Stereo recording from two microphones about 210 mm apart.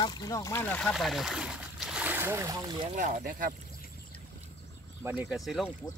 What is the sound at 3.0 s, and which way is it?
Speech, 35° right (ahead or behind).